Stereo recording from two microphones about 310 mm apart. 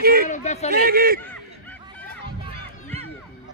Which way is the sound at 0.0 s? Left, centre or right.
Right.